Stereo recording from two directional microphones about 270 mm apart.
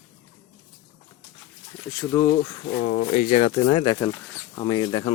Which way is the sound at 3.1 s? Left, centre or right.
Left.